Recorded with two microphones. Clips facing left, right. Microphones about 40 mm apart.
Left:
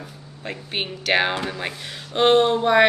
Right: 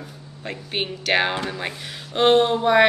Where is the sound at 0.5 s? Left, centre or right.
Centre.